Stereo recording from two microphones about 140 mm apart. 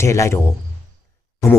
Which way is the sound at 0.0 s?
20° left (ahead or behind).